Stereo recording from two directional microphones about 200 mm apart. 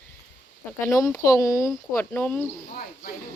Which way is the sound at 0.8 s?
15° left (ahead or behind).